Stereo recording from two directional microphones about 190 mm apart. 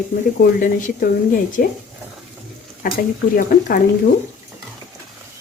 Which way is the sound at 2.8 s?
45° left (ahead or behind).